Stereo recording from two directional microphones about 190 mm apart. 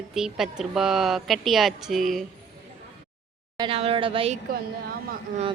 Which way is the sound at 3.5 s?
25° right (ahead or behind).